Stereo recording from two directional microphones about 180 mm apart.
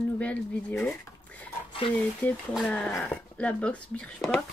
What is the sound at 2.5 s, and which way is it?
Speech, 5° left (ahead or behind).